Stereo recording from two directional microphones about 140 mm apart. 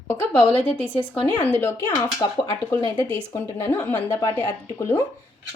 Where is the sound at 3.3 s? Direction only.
15° left (ahead or behind).